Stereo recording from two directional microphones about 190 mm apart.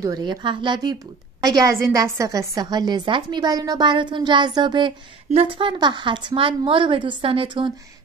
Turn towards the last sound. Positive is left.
turn(degrees=-25)  # may be behind; listen again after turning